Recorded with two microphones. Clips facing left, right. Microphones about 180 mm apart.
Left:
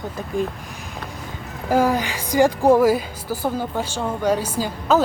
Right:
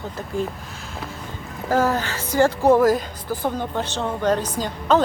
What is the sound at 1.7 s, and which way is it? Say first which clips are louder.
A woman's voice: left 2 dB; 10° left (ahead or behind).